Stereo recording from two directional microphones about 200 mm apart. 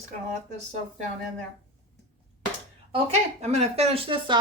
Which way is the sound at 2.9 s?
30° right (ahead or behind).